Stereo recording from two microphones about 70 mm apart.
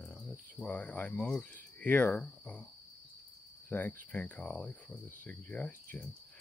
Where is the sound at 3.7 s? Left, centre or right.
Left.